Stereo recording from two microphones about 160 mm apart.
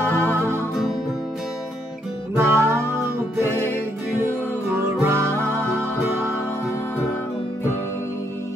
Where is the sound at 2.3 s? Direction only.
15° right (ahead or behind).